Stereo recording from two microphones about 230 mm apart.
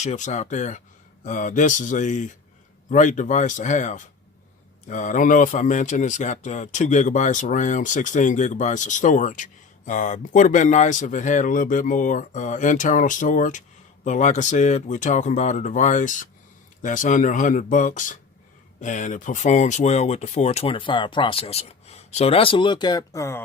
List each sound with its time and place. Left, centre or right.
0.0 s speech: left; by 23.4 s centre